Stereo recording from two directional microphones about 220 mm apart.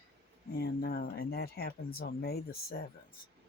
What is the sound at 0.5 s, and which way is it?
Speech, 45° left (ahead or behind).